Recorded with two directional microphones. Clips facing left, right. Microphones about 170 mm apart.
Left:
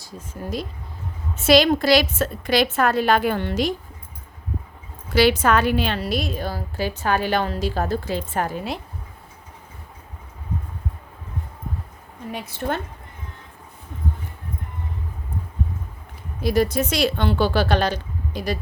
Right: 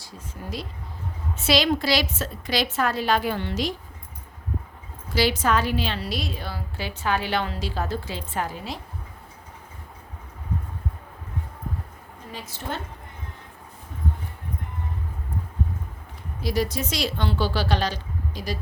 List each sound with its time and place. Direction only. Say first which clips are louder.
1.5 s a woman's voice: left 6 dB; 50° left (ahead or behind)
5.1 s a woman's voice: left 5 dB; 65° left (ahead or behind)
12.3 s a woman's voice: left 7 dB; 60° left (ahead or behind)
16.4 s a woman's voice: left 6 dB; 55° left (ahead or behind)